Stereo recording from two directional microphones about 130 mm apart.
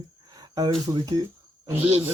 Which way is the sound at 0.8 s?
30° right (ahead or behind).